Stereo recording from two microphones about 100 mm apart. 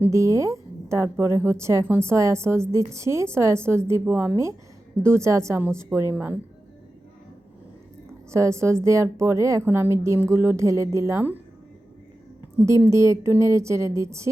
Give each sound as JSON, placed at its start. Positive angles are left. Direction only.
{"t": 0.1, "sound": "a woman's voice", "side_deg": -30}
{"t": 8.3, "sound": "a woman's voice", "side_deg": -30}
{"t": 12.6, "sound": "a woman's voice", "side_deg": -30}